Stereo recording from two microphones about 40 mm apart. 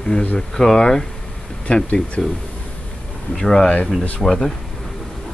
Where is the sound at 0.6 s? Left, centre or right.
Centre.